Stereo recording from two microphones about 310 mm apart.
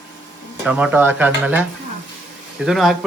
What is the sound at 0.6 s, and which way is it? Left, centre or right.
Speech, centre.